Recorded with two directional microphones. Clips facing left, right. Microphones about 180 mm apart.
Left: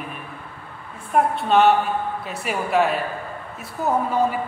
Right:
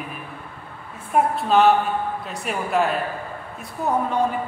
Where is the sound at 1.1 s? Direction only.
Centre (ahead or behind).